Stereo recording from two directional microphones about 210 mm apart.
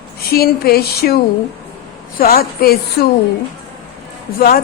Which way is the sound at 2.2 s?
45° left (ahead or behind).